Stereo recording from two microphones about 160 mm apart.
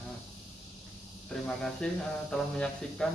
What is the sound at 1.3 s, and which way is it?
Speech, 5° left (ahead or behind).